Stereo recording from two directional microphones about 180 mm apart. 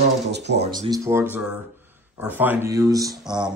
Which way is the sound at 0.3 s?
70° right (ahead or behind).